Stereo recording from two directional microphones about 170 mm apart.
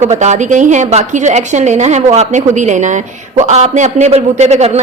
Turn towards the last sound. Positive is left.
turn(degrees=-40)  # may be behind; listen again after turning